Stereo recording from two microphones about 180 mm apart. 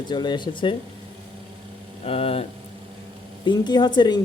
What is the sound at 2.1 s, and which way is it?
Speech, 30° left (ahead or behind).